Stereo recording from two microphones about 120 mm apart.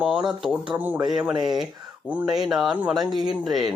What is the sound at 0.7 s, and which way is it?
Speech, 15° right (ahead or behind).